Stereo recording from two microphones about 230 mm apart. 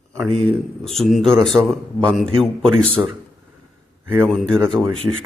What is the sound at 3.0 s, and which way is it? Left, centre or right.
Speech, centre.